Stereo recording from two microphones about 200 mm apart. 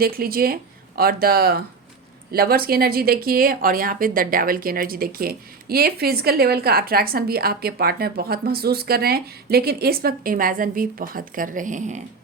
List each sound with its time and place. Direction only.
0.0 s speech: 50° right (ahead or behind)